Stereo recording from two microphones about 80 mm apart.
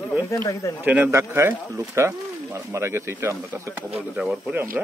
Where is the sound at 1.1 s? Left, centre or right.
Right.